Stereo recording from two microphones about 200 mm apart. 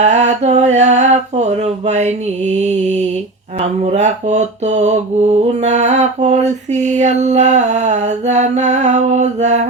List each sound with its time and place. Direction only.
0.0 s mantra: 35° right (ahead or behind)